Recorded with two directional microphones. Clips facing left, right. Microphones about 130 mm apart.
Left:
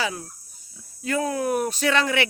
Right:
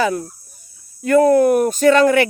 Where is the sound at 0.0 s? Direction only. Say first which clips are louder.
Right 10 dB; 55° right (ahead or behind).